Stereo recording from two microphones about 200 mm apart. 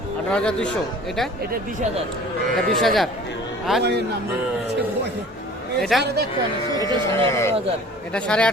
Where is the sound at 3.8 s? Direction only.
55° right (ahead or behind).